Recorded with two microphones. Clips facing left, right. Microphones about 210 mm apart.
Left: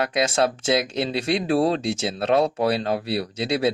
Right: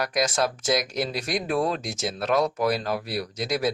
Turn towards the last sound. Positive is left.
turn(degrees=30)  # may be behind; listen again after turning